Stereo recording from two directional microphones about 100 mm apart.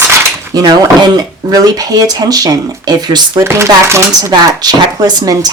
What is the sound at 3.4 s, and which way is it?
Speech, 25° right (ahead or behind).